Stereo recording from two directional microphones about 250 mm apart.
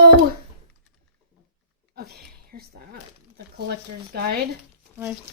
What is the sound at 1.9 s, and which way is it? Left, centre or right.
Speech, right.